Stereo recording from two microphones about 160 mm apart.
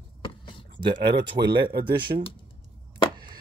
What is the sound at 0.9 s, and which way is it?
Speech, 30° right (ahead or behind).